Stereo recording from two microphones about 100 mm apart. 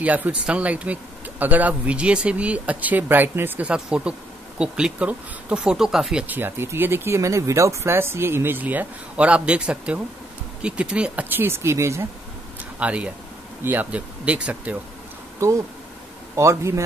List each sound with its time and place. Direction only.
0.0 s speech: 15° right (ahead or behind)
6.2 s speech: 20° right (ahead or behind)
12.7 s speech: 10° right (ahead or behind)
15.4 s speech: 30° right (ahead or behind)